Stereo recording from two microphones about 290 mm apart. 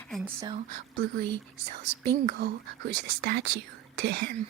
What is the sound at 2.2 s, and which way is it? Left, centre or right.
Speech, right.